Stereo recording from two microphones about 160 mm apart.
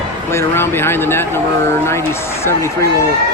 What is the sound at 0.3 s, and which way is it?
Speech, 15° left (ahead or behind).